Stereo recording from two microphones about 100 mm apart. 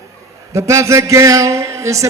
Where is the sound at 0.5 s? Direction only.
30° right (ahead or behind).